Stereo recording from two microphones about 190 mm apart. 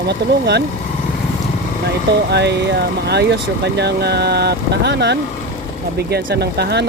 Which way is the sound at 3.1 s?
60° right (ahead or behind).